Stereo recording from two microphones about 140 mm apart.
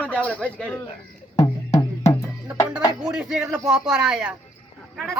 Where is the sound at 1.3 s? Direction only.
25° left (ahead or behind).